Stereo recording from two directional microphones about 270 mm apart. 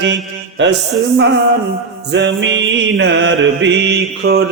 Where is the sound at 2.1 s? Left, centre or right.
Right.